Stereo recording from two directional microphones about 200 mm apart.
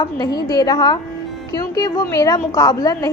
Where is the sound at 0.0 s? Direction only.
20° left (ahead or behind).